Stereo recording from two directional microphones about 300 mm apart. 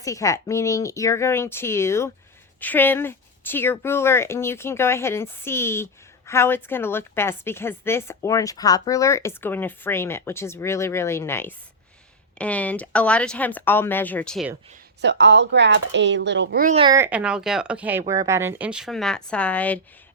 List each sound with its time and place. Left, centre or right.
0.0 s speech: centre
15.0 s speech: right; by 19.8 s centre